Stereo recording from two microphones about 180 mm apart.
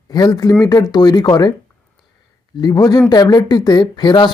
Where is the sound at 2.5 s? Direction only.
20° left (ahead or behind).